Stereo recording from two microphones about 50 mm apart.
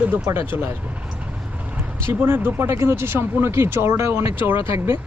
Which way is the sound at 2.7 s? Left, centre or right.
Right.